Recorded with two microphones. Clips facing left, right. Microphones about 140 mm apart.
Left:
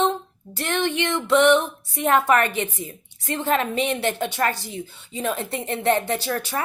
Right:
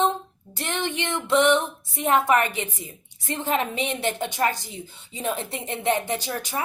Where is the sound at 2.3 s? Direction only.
15° right (ahead or behind).